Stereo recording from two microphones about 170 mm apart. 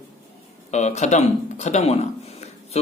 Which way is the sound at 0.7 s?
40° left (ahead or behind).